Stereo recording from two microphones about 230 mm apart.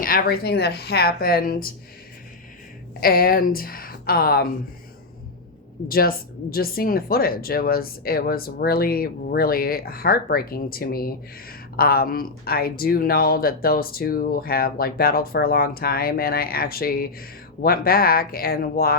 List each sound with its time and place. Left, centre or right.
0.0 s speech: left
3.0 s speech: left
5.9 s speech: left